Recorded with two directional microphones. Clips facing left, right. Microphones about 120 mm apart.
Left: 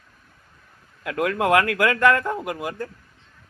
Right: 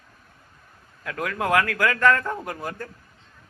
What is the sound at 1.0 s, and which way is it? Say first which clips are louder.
A man's voice: left 4 dB; 20° left (ahead or behind).